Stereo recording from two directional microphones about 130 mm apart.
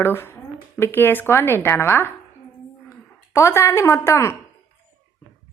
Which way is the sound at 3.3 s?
20° left (ahead or behind).